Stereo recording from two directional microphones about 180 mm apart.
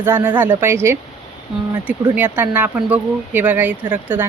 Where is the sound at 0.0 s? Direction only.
10° right (ahead or behind).